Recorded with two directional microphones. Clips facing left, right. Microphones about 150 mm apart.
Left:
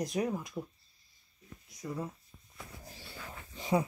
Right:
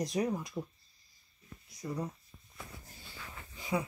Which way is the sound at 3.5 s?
30° left (ahead or behind).